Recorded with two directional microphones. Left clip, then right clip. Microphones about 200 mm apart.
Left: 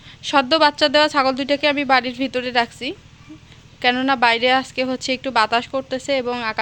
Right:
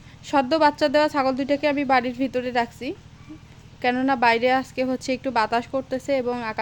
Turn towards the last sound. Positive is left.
turn(degrees=-5)  # may be behind; listen again after turning